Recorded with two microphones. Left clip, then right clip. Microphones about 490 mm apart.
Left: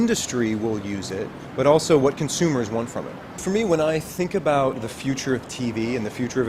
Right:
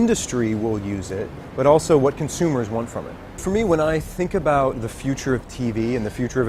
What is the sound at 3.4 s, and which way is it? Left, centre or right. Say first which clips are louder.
Speech: right 2 dB; right.